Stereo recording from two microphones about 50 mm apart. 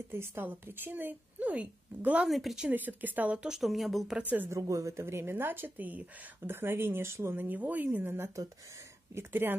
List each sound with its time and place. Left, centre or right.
0.1 s speech: right
1.4 s a woman's voice: right
2.2 s speech: centre
2.7 s speech: right
3.3 s speech: centre
4.2 s speech: right
4.5 s speech: right
6.4 s speech: right
7.3 s speech: right